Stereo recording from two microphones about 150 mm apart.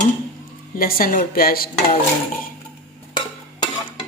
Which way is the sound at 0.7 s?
70° left (ahead or behind).